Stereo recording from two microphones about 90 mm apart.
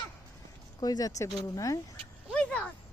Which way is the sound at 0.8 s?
45° left (ahead or behind).